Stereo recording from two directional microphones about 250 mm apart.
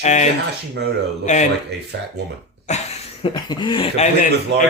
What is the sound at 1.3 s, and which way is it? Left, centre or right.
Speech, left.